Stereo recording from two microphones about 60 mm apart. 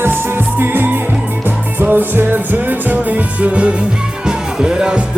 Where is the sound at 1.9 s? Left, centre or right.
Right.